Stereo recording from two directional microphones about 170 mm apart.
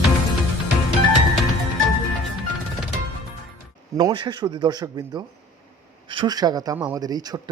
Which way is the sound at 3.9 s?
25° right (ahead or behind).